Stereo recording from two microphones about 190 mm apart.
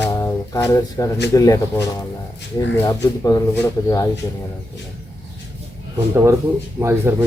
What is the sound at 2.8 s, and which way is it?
Speech, 20° left (ahead or behind).